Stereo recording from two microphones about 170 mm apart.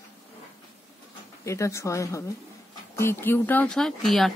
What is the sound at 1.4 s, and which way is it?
Speech, 15° left (ahead or behind).